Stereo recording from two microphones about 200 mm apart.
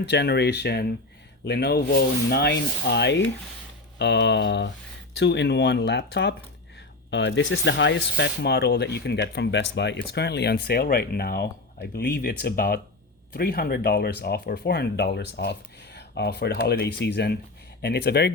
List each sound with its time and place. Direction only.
0.0 s speech: 60° left (ahead or behind)